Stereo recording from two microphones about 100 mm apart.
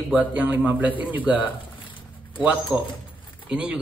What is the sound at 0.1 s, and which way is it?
Speech, 10° right (ahead or behind).